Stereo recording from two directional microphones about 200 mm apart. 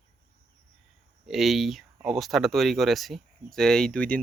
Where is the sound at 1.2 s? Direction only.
Centre (ahead or behind).